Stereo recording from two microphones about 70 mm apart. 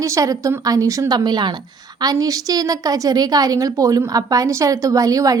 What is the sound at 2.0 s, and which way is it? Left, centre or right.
A woman's voice, right.